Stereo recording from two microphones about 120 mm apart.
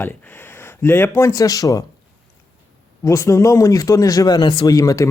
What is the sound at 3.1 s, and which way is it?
Speech, 25° left (ahead or behind).